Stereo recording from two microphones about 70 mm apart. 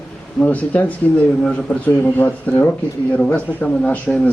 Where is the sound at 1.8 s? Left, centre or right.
Left.